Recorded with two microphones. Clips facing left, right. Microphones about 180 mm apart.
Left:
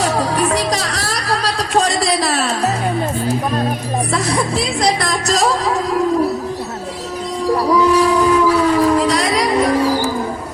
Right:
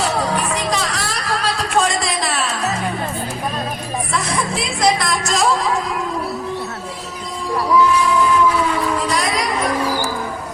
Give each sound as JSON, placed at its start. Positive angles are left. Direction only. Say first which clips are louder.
{"t": 0.0, "sound": "music", "louder": "left 3 dB", "side_deg": 40}
{"t": 4.8, "sound": "music", "louder": "right 3 dB", "side_deg": 35}
{"t": 7.7, "sound": "train", "louder": "left 1 dB", "side_deg": 40}